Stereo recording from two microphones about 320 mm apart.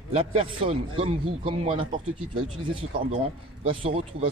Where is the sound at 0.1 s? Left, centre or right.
Centre.